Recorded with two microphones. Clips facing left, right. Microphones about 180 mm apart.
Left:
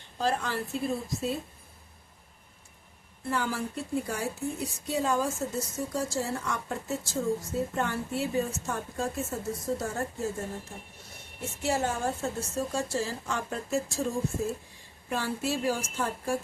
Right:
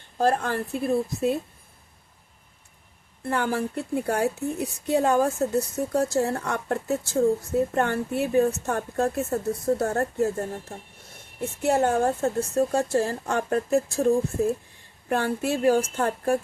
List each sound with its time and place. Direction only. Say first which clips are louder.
0.2 s a woman's voice: right 6 dB; 50° right (ahead or behind)
3.2 s a woman's voice: right 5 dB; 60° right (ahead or behind)
11.6 s a woman's voice: right 7 dB; 60° right (ahead or behind)